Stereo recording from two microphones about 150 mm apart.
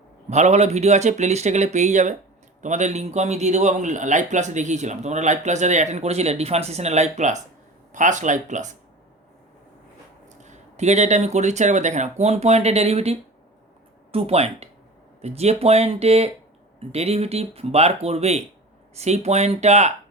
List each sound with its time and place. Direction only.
0.3 s a man's voice: 50° right (ahead or behind)
10.2 s a man's voice: 50° right (ahead or behind)